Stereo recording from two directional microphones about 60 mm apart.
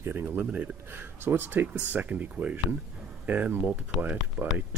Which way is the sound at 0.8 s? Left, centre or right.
Right.